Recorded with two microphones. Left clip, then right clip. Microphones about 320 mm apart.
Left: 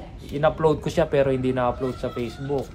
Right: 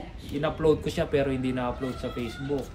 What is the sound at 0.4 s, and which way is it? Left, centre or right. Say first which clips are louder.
Speech: left 4 dB; centre.